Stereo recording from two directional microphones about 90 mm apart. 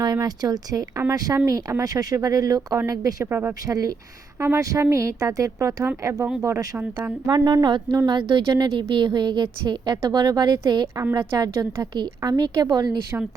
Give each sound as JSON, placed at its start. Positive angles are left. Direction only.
{"t": 0.0, "sound": "a woman's voice", "side_deg": -50}
{"t": 3.2, "sound": "a woman's voice", "side_deg": -25}
{"t": 7.3, "sound": "a woman's voice", "side_deg": -50}